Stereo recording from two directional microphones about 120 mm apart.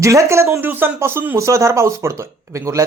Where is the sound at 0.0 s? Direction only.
25° right (ahead or behind).